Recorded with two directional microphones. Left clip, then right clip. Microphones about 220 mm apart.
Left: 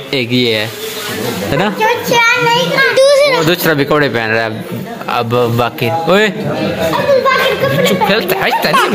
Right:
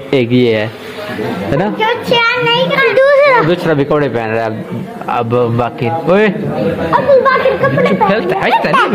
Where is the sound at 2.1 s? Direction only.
25° right (ahead or behind).